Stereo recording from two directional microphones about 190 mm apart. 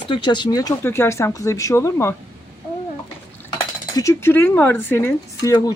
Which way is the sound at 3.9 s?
15° left (ahead or behind).